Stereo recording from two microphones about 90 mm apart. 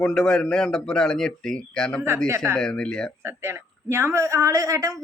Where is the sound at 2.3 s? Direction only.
35° right (ahead or behind).